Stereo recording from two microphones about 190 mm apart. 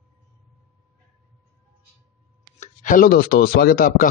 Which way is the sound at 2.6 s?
45° left (ahead or behind).